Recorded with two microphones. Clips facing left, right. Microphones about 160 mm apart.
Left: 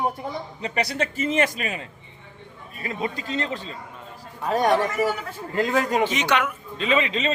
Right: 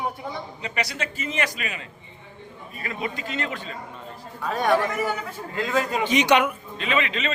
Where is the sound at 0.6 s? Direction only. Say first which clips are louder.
Left 5 dB; 35° left (ahead or behind).